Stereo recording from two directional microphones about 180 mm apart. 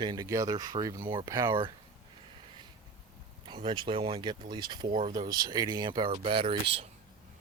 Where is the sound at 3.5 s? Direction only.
25° right (ahead or behind).